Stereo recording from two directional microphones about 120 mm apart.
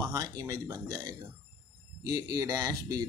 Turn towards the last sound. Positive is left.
turn(degrees=-35)  # may be behind; listen again after turning